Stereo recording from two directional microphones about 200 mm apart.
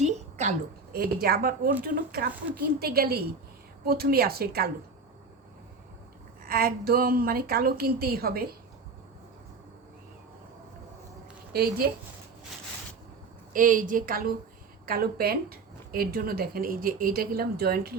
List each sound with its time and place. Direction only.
0.0 s a sound: 35° right (ahead or behind)
0.9 s speech: 50° right (ahead or behind)
6.4 s speech: 45° right (ahead or behind)
11.5 s speech: 50° right (ahead or behind)
13.5 s speech: 40° right (ahead or behind)